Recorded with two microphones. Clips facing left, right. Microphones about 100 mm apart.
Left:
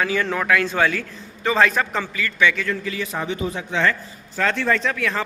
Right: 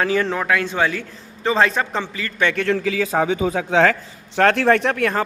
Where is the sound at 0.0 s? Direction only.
35° right (ahead or behind).